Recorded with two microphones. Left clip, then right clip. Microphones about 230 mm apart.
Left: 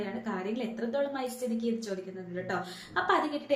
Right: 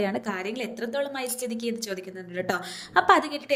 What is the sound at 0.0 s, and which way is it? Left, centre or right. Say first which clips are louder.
A woman's voice: right 7 dB; right.